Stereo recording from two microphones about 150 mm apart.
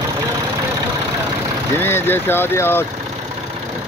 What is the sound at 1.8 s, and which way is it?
Speech, 15° left (ahead or behind).